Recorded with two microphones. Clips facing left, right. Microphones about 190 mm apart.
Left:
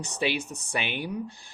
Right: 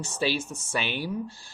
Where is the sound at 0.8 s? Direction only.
55° left (ahead or behind).